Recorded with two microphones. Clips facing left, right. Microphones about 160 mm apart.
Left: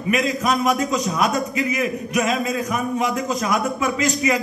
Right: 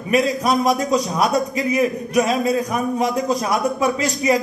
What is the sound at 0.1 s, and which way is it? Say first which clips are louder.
A man's voice: right 3 dB; 35° right (ahead or behind).